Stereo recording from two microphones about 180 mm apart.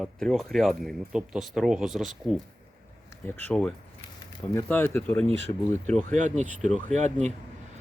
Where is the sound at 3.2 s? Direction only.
10° left (ahead or behind).